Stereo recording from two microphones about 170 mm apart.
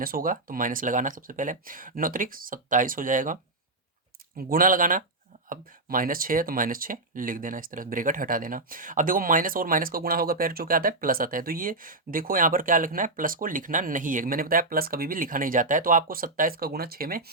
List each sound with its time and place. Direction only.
0.0 s speech: 55° right (ahead or behind)
4.4 s speech: 60° right (ahead or behind)